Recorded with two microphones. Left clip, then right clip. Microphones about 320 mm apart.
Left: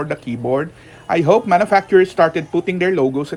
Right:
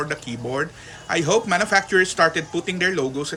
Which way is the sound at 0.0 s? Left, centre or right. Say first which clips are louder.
Left 4 dB; centre.